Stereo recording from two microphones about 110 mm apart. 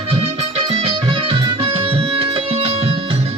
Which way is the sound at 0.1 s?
65° right (ahead or behind).